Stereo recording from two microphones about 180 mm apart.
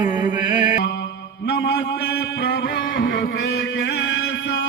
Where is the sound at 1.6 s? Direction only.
70° left (ahead or behind); by 3.3 s 90° left.